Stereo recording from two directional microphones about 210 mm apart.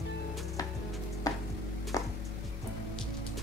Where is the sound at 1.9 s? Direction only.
15° left (ahead or behind).